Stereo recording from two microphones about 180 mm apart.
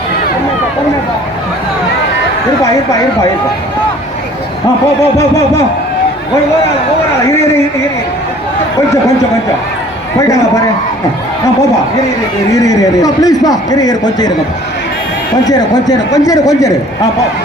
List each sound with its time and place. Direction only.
12.6 s a man's voice: 20° left (ahead or behind)
15.4 s a man's voice: 20° left (ahead or behind)